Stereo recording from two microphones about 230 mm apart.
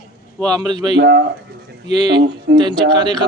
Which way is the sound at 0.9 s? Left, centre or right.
Right.